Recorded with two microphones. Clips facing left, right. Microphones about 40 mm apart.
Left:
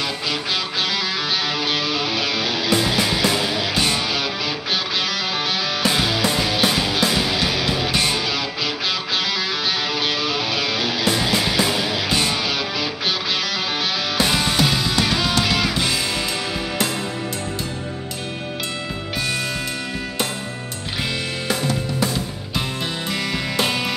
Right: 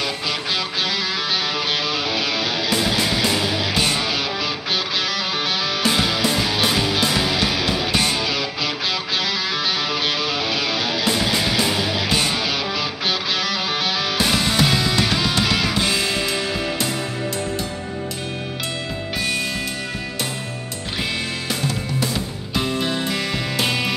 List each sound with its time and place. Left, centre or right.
0.0 s music: centre
15.9 s music: right
22.6 s music: centre